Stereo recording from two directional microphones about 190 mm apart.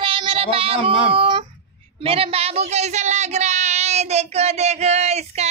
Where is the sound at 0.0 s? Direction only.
25° right (ahead or behind).